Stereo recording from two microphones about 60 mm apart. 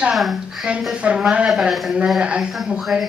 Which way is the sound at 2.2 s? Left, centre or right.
Centre.